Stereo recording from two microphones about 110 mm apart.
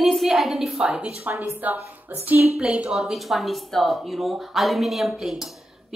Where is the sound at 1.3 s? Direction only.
20° right (ahead or behind); by 5.6 s centre (ahead or behind).